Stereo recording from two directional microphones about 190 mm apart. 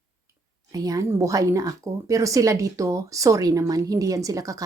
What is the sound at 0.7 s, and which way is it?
Speech, 20° right (ahead or behind).